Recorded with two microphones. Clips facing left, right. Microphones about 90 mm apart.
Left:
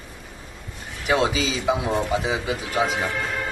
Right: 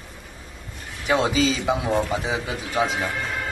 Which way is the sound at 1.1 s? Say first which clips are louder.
Right 1 dB; centre (ahead or behind).